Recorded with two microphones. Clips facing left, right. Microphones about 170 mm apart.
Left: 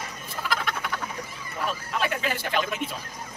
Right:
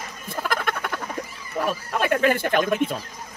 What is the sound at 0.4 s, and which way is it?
Frog, 50° right (ahead or behind).